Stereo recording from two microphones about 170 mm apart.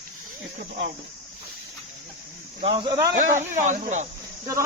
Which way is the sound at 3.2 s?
45° right (ahead or behind).